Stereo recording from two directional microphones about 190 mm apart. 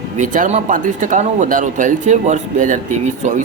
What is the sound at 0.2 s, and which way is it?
Speech, 40° right (ahead or behind).